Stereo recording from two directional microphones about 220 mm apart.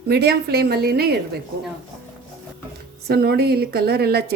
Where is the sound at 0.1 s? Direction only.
45° right (ahead or behind).